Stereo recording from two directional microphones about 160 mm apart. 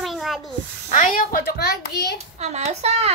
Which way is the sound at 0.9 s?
55° left (ahead or behind).